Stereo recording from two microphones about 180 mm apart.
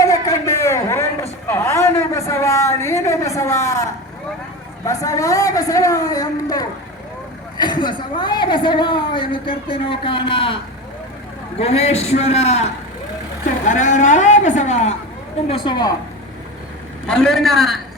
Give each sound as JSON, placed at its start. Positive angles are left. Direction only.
{"t": 0.0, "sound": "a sound", "side_deg": 20}
{"t": 4.9, "sound": "a woman's voice", "side_deg": 20}
{"t": 11.6, "sound": "a man's voice", "side_deg": 35}
{"t": 15.4, "sound": "a woman's voice", "side_deg": 30}
{"t": 17.1, "sound": "a man's voice", "side_deg": 0}